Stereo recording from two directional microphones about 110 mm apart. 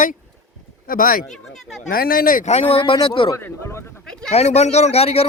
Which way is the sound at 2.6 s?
55° left (ahead or behind).